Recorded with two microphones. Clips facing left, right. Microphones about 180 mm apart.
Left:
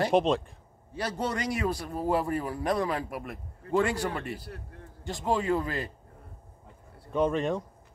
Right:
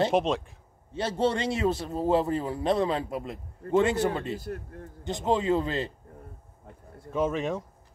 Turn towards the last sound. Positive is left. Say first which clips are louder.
# left 1 dB
turn(degrees=0)  # may be behind; listen again after turning